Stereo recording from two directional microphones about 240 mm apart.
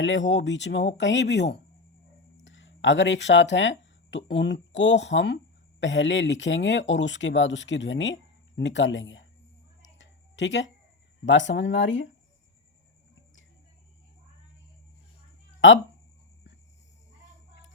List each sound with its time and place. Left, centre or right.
0.0 s speech: left
2.4 s a sound: left
4.3 s speech: left
10.0 s a sound: left
11.3 s speech: left
15.6 s speech: left